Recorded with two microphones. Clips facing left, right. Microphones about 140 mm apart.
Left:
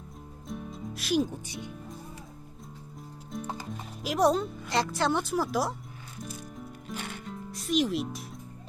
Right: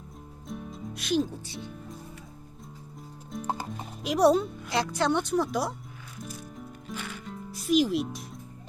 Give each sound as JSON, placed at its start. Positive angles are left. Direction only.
{"t": 0.4, "sound": "music", "side_deg": 0}
{"t": 1.3, "sound": "speech", "side_deg": 15}
{"t": 3.4, "sound": "horse", "side_deg": -40}
{"t": 3.7, "sound": "speech", "side_deg": 0}
{"t": 6.9, "sound": "music", "side_deg": 35}
{"t": 7.3, "sound": "music", "side_deg": 0}